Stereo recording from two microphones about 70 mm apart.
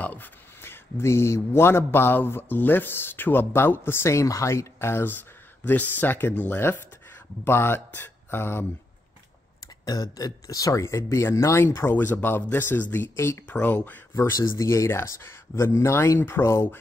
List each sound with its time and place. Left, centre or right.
0.0 s a sound: left
0.6 s a man's voice: left
9.8 s a man's voice: left
13.1 s a man's voice: left
13.5 s speech: left
14.4 s a man's voice: left